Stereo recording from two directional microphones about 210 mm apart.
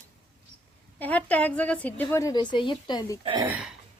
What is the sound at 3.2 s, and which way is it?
Speech, 25° right (ahead or behind).